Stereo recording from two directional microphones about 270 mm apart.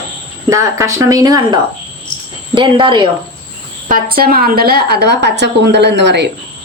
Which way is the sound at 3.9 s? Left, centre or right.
Right.